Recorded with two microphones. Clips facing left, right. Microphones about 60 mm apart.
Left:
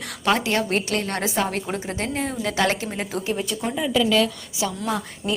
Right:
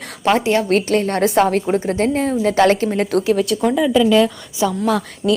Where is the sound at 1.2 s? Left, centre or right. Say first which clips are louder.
Right 12 dB; right.